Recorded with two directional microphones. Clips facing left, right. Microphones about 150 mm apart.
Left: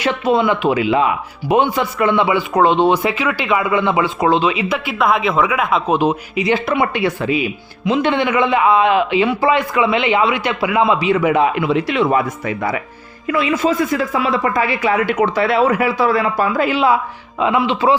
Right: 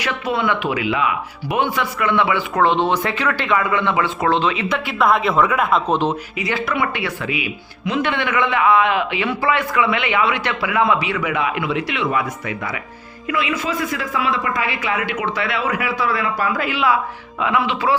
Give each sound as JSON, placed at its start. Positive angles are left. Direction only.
{"t": 0.0, "sound": "a man's voice", "side_deg": 25}
{"t": 1.5, "sound": "speech", "side_deg": 20}
{"t": 4.9, "sound": "speech", "side_deg": 0}
{"t": 6.3, "sound": "a man's voice", "side_deg": 20}
{"t": 7.2, "sound": "speech", "side_deg": 35}
{"t": 7.9, "sound": "a man's voice", "side_deg": 25}